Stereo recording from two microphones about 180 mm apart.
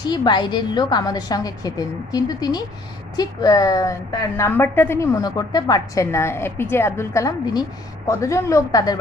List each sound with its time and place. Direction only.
0.0 s a woman's voice: 25° left (ahead or behind)